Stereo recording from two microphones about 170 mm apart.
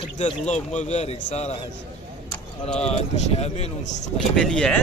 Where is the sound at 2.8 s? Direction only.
40° left (ahead or behind).